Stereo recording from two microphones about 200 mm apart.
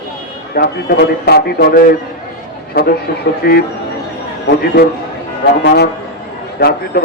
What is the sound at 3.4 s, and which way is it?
Speech, 50° left (ahead or behind).